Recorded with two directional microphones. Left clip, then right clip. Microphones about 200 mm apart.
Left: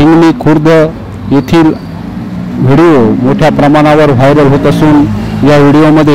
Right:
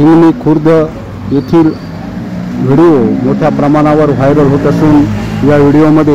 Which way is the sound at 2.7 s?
30° left (ahead or behind).